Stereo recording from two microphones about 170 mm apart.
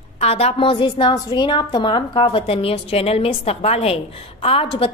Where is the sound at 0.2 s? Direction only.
35° left (ahead or behind).